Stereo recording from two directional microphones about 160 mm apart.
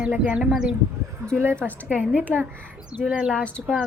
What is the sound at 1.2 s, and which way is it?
A woman's voice, 15° right (ahead or behind).